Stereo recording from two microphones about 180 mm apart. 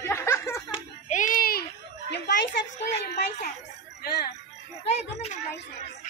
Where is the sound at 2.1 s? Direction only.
65° left (ahead or behind).